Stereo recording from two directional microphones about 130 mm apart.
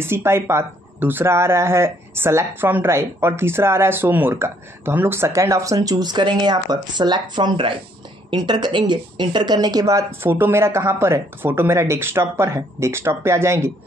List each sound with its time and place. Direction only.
0.0 s speech: 20° right (ahead or behind)